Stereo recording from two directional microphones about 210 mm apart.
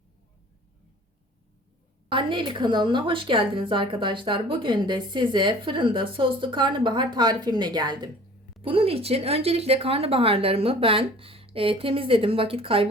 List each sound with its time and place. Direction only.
2.0 s a woman's voice: 25° right (ahead or behind)